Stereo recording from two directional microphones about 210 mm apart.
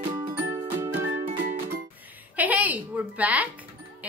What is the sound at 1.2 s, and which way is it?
Music, 40° right (ahead or behind).